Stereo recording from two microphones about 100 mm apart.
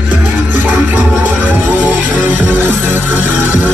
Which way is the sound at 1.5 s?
15° right (ahead or behind).